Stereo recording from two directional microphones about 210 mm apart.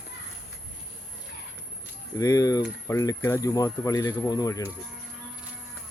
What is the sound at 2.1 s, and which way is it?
Speech, 15° left (ahead or behind).